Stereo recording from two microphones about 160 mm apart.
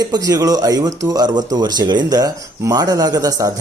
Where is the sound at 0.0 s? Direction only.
25° right (ahead or behind).